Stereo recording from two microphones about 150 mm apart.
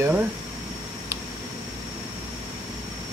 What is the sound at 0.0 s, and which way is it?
Speech, 15° right (ahead or behind).